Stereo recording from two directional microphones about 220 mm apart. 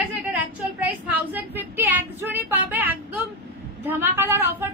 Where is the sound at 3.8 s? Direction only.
10° right (ahead or behind).